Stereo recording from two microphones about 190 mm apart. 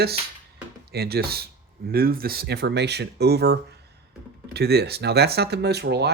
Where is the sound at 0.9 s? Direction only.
55° right (ahead or behind).